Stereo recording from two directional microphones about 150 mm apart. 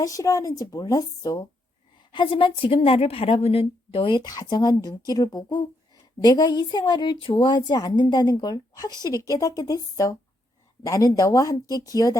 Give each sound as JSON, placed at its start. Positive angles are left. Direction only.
{"t": 0.0, "sound": "a woman's voice", "side_deg": 20}